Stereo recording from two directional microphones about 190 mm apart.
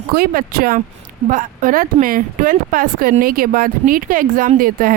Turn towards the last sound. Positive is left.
turn(degrees=-50)  # may be behind; listen again after turning